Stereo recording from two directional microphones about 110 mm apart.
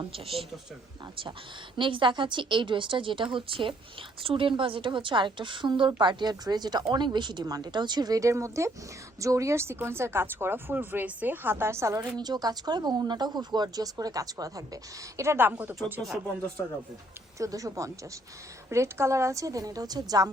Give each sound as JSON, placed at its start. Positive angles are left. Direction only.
{"t": 0.0, "sound": "speech", "side_deg": -60}
{"t": 1.7, "sound": "a woman's voice", "side_deg": -50}
{"t": 12.1, "sound": "speech", "side_deg": -40}
{"t": 17.3, "sound": "speech", "side_deg": -30}